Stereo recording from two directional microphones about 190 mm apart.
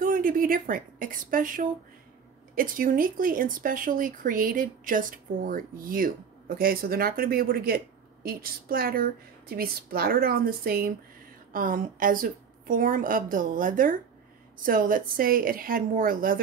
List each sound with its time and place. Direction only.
0.0 s speech: 45° right (ahead or behind)